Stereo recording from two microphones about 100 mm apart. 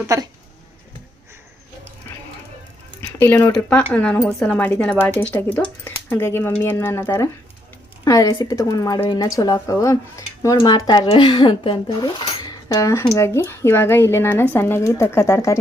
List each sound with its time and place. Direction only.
3.0 s speech: 25° left (ahead or behind)
10.7 s speech: 45° left (ahead or behind)
12.2 s speech: 40° left (ahead or behind)